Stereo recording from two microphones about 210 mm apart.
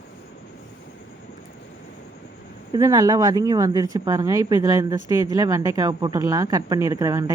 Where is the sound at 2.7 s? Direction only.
15° right (ahead or behind).